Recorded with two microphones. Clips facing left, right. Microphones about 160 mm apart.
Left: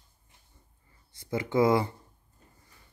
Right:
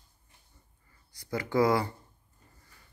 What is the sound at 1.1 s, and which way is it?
Speech, 25° left (ahead or behind).